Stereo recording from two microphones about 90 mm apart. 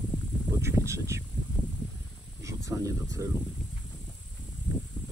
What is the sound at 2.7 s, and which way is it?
Speech, 35° right (ahead or behind).